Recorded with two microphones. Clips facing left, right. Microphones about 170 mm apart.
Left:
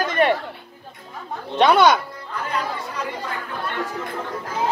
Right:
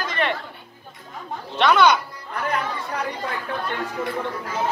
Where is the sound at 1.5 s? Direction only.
45° left (ahead or behind).